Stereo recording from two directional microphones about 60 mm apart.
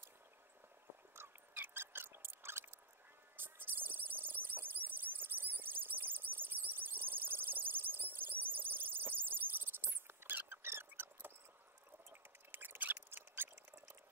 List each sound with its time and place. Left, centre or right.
1.5 s a sound: right
12.1 s mouse: right
13.7 s drip: right